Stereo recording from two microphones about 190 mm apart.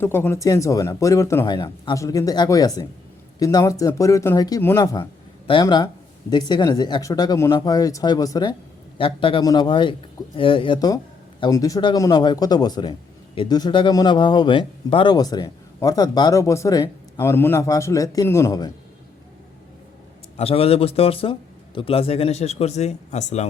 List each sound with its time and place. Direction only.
0.0 s a man's voice: 10° left (ahead or behind)
20.3 s speech: 30° left (ahead or behind)